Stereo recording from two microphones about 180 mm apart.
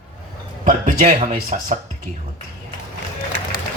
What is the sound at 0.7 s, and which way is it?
Speech, 40° right (ahead or behind).